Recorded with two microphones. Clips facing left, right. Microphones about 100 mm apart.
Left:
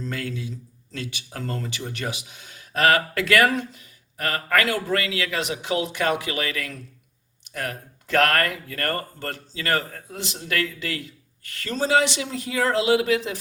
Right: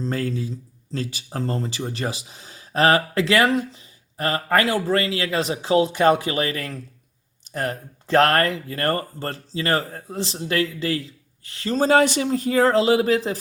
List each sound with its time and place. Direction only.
0.0 s speech: 35° right (ahead or behind)
11.8 s speech: 45° right (ahead or behind)